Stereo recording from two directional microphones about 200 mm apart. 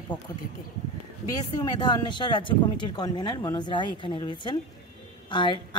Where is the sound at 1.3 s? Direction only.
20° left (ahead or behind).